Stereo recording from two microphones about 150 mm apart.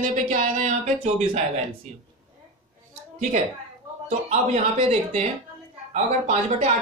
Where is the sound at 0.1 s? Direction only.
50° right (ahead or behind).